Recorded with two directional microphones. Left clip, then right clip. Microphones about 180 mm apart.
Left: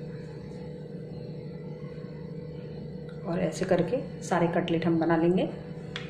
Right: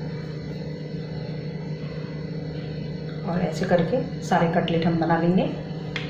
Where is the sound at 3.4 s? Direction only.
50° left (ahead or behind).